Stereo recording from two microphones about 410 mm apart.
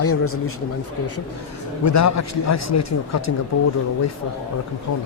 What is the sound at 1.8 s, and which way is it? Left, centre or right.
A man's voice, left.